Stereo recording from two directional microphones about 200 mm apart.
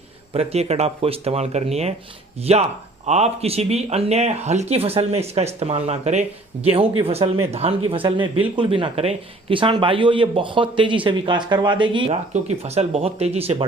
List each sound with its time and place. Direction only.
0.3 s speech: 30° right (ahead or behind)